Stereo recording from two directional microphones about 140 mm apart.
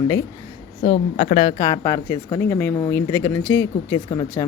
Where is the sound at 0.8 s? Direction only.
40° left (ahead or behind).